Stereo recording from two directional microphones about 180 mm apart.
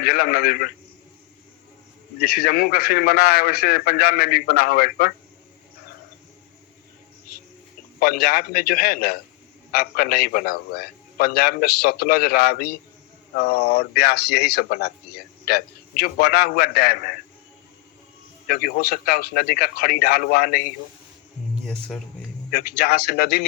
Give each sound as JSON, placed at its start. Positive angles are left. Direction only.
{"t": 0.0, "sound": "a man's voice", "side_deg": 55}
{"t": 2.2, "sound": "a man's voice", "side_deg": 55}
{"t": 7.9, "sound": "a man's voice", "side_deg": 55}
{"t": 18.4, "sound": "a man's voice", "side_deg": 55}
{"t": 21.6, "sound": "speech", "side_deg": 5}
{"t": 22.4, "sound": "a man's voice", "side_deg": 55}